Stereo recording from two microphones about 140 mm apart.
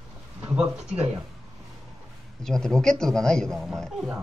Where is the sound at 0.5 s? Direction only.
10° right (ahead or behind).